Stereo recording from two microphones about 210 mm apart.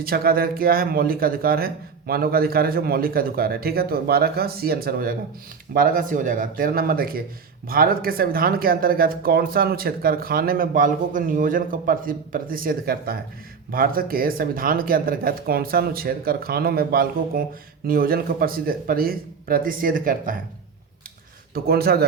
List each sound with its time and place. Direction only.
0.0 s speech: 45° right (ahead or behind)
21.5 s speech: 45° right (ahead or behind)